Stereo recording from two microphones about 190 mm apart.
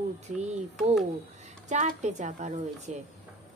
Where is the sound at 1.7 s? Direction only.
40° right (ahead or behind).